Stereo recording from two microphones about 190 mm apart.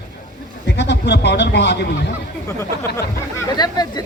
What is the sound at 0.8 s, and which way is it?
Speech, 65° left (ahead or behind).